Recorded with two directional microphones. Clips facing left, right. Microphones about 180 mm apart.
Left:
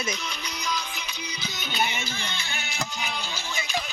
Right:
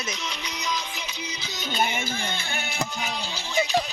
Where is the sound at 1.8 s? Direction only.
50° right (ahead or behind).